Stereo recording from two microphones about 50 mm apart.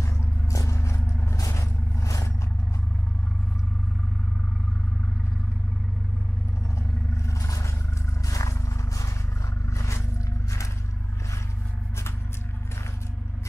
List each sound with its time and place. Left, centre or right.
0.0 s vehicle: left
7.2 s roar: left
8.4 s vehicle: left
9.7 s scrape: left